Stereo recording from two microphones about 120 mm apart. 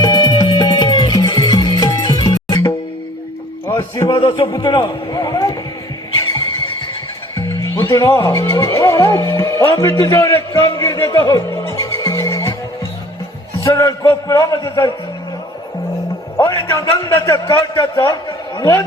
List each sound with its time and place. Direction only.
0.0 s music: 35° left (ahead or behind)
3.7 s a sound: 25° left (ahead or behind)
4.4 s a man's voice: 40° left (ahead or behind)
7.3 s speech: 25° left (ahead or behind)
11.4 s music: 25° left (ahead or behind)
13.6 s speech: 30° left (ahead or behind)
16.4 s speech: 35° left (ahead or behind)